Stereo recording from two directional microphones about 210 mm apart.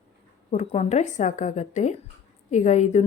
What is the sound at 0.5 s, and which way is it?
Speech, 30° left (ahead or behind).